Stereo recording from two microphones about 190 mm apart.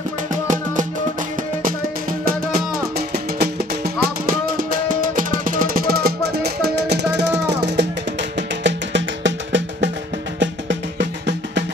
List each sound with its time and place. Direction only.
0.3 s music: 40° right (ahead or behind)
3.1 s music: 55° right (ahead or behind)